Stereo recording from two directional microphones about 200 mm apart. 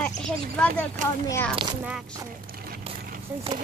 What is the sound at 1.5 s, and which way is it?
Speech, 25° right (ahead or behind).